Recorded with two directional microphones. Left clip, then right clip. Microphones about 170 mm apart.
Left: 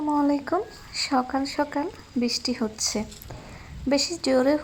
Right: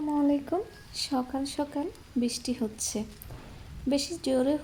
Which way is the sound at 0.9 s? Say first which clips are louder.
Left 6 dB; 10° right (ahead or behind).